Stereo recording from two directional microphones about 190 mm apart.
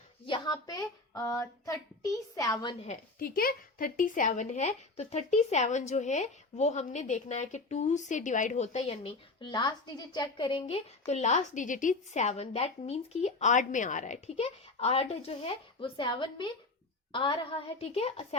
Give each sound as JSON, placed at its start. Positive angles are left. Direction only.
{"t": 0.3, "sound": "speech", "side_deg": 25}
{"t": 3.2, "sound": "speech", "side_deg": 50}